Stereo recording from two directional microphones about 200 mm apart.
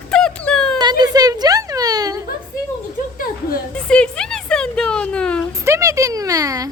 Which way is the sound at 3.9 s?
5° left (ahead or behind).